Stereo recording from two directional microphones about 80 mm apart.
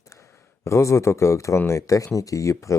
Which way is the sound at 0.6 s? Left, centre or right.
Left.